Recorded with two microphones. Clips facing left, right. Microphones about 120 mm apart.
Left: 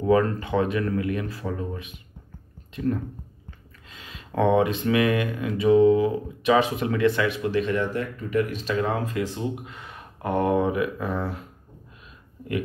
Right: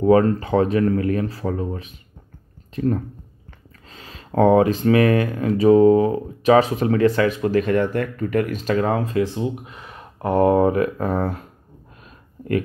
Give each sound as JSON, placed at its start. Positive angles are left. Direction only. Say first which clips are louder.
{"t": 0.0, "sound": "speech", "louder": "right 5 dB", "side_deg": -35}